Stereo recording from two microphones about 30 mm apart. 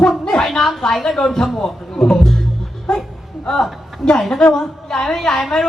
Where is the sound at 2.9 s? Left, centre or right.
Left.